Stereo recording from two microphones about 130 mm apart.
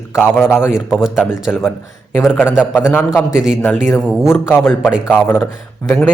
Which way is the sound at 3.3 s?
5° right (ahead or behind).